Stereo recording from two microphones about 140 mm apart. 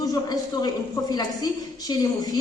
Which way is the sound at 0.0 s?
30° left (ahead or behind).